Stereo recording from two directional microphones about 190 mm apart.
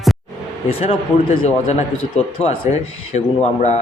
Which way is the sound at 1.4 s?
35° left (ahead or behind).